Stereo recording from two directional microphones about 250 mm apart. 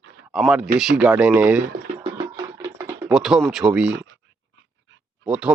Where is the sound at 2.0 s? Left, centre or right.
Centre.